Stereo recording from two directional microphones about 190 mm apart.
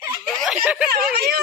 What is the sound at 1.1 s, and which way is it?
Speech, 55° right (ahead or behind).